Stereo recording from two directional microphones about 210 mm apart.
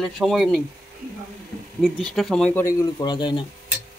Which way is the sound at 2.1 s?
Centre (ahead or behind).